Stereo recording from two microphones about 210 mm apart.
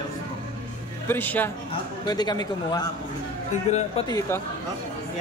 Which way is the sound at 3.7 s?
35° left (ahead or behind).